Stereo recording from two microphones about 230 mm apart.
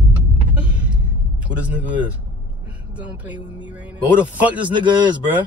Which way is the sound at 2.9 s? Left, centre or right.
Centre.